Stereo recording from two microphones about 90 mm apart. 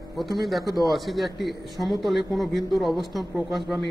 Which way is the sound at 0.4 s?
Centre (ahead or behind).